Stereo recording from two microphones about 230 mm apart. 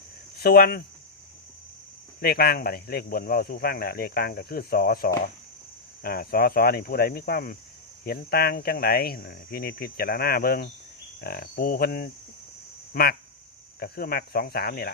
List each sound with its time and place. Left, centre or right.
0.3 s speech: left
2.2 s speech: left